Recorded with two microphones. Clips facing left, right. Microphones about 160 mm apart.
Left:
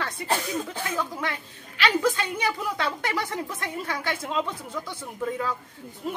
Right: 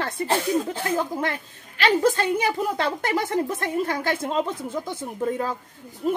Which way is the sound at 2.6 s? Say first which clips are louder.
Right 4 dB; 45° right (ahead or behind).